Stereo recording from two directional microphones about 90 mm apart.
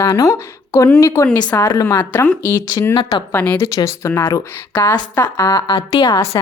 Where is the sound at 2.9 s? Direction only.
50° left (ahead or behind).